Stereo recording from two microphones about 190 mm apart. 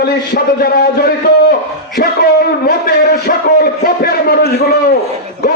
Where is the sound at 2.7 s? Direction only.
55° left (ahead or behind).